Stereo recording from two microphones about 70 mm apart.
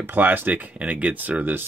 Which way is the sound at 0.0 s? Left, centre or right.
Right.